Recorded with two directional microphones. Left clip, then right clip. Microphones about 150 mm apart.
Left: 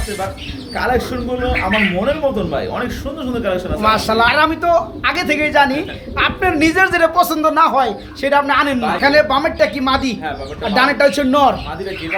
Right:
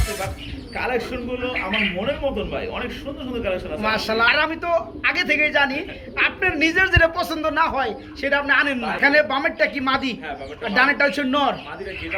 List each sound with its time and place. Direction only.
0.8 s speech: 40° left (ahead or behind)
2.0 s speech: 40° left (ahead or behind)
3.8 s a man's voice: 15° left (ahead or behind)
9.0 s a man's voice: 5° left (ahead or behind)